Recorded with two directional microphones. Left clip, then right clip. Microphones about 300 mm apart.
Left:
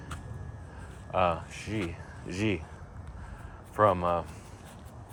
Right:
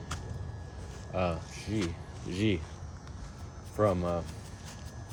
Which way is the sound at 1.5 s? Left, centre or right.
Left.